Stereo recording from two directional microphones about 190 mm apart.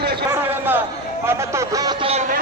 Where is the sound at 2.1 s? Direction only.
35° right (ahead or behind).